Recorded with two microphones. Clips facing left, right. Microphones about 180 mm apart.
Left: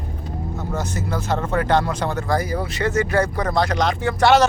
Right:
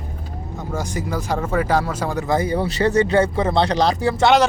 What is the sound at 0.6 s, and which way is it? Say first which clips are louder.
Speech: right 2 dB; 10° right (ahead or behind).